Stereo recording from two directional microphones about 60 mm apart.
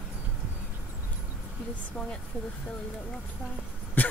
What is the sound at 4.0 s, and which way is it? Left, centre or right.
Throat clearing, left.